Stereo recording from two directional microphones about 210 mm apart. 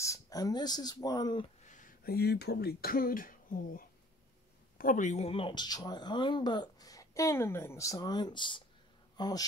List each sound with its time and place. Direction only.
0.0 s speech: 15° left (ahead or behind)
1.7 s speech: 40° left (ahead or behind); by 9.5 s 20° left (ahead or behind)